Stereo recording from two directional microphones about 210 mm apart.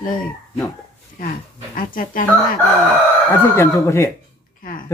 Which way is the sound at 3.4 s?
10° left (ahead or behind).